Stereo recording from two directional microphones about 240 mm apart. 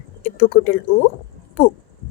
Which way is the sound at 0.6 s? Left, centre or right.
Left.